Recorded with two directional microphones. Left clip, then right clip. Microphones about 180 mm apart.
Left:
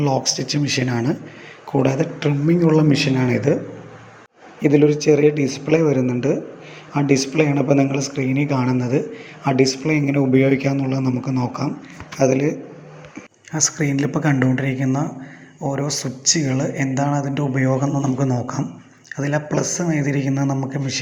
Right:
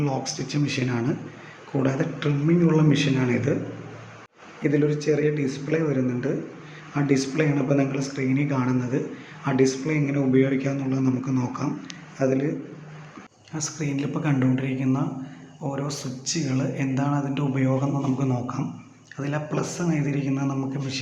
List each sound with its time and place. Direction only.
0.0 s a man's voice: 25° left (ahead or behind)
4.6 s a man's voice: 30° left (ahead or behind)